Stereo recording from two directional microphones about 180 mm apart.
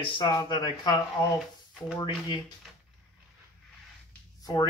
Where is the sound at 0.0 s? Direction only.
25° left (ahead or behind).